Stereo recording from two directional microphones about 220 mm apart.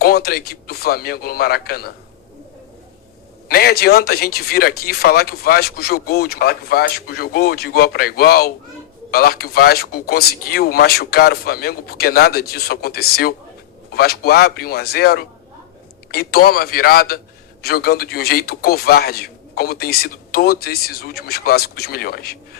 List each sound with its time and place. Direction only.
0.0 s speech: 45° left (ahead or behind)
3.5 s speech: 45° left (ahead or behind)